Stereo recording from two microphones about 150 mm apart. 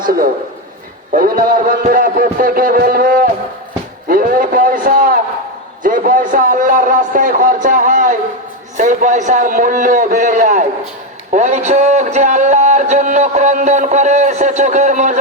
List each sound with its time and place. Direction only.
1.1 s a man's voice: 70° right (ahead or behind)
4.1 s a sound: 65° right (ahead or behind)
8.8 s a man's voice: 55° right (ahead or behind)